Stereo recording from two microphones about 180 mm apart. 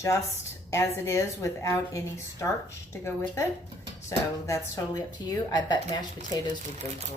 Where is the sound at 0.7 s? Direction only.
15° left (ahead or behind).